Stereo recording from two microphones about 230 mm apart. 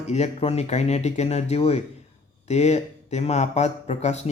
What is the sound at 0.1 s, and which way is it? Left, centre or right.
Speech, left.